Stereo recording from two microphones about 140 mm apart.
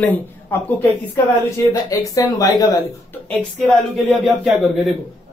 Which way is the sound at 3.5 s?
10° left (ahead or behind).